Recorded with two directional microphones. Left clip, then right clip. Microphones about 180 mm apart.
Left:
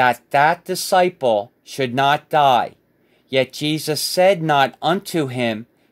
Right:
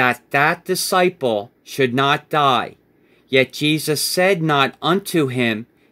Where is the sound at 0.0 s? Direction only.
20° left (ahead or behind).